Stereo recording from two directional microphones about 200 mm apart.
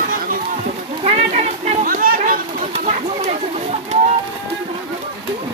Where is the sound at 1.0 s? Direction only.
30° right (ahead or behind).